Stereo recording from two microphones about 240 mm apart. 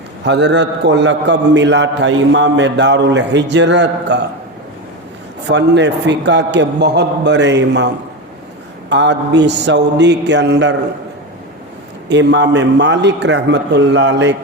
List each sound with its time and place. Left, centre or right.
0.3 s a man's voice: right
5.5 s a man's voice: right
8.9 s a man's voice: right
12.0 s a man's voice: right